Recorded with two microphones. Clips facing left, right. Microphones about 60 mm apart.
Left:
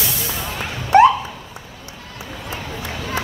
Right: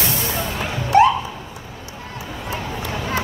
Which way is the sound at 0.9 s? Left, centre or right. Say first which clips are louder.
Left 2 dB; left.